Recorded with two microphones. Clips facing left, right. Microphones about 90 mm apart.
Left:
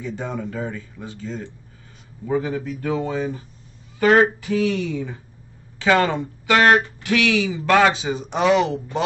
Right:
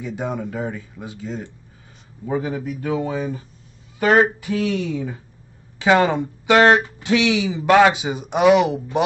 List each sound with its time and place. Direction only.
0.0 s speech: 15° right (ahead or behind)